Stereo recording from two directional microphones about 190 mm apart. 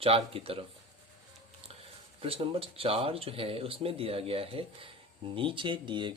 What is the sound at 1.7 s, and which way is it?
Speech, 30° right (ahead or behind).